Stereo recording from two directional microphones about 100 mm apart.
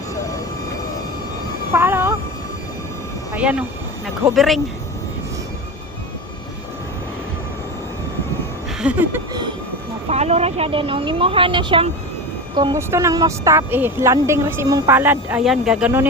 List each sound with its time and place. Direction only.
1.7 s a sound: 25° right (ahead or behind)
3.3 s speech: 15° right (ahead or behind)
4.4 s speech: centre (ahead or behind)
8.8 s a sound: 15° right (ahead or behind)
10.1 s speech: 90° right; by 11.9 s 60° right (ahead or behind)
12.7 s speech: 30° right (ahead or behind)
14.7 s speech: 35° right (ahead or behind)
14.9 s speech: 20° right (ahead or behind)
15.4 s speech: 5° right (ahead or behind)